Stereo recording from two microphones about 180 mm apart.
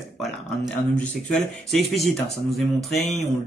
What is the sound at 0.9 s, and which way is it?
Speech, 5° left (ahead or behind).